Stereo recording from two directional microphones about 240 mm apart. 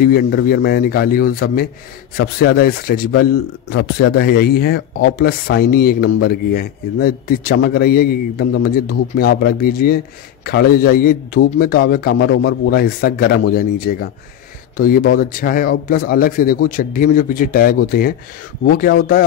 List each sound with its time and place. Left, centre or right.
0.0 s a man's voice: left
6.0 s speech: left
6.5 s a man's voice: left
12.1 s a man's voice: left